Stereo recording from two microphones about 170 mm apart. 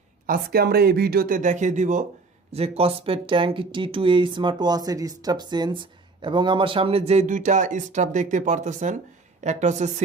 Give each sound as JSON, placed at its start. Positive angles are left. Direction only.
{"t": 0.3, "sound": "a woman's voice", "side_deg": -65}